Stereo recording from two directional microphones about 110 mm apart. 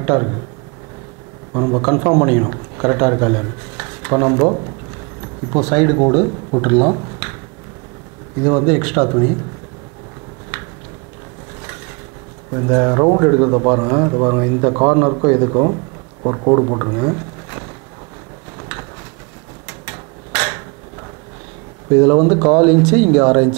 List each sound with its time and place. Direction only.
0.0 s speech: 20° right (ahead or behind)
1.5 s speech: 25° right (ahead or behind)
8.5 s speech: 20° right (ahead or behind)
12.5 s speech: 20° right (ahead or behind)
21.9 s speech: 20° right (ahead or behind)